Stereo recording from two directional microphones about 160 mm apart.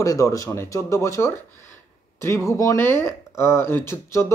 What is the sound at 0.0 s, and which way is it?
Speech, 20° left (ahead or behind).